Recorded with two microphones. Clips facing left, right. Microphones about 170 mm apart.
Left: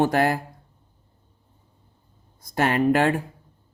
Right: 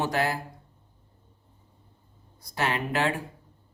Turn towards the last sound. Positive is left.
turn(degrees=50)  # may be behind; listen again after turning